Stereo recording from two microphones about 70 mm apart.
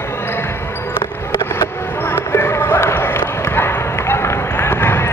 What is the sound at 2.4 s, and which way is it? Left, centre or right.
Run, left.